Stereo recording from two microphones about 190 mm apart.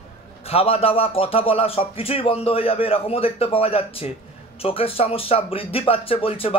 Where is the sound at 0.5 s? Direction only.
30° left (ahead or behind).